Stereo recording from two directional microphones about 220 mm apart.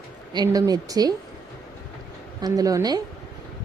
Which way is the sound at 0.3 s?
15° right (ahead or behind).